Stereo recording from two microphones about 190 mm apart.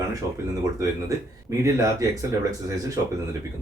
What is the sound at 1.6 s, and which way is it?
Speech, 15° right (ahead or behind).